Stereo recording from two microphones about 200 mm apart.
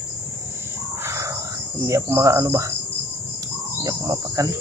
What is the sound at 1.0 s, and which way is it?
Wild animals, 15° right (ahead or behind).